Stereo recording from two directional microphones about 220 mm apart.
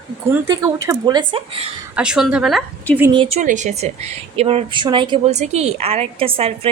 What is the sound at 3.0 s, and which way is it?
Speech, 20° right (ahead or behind).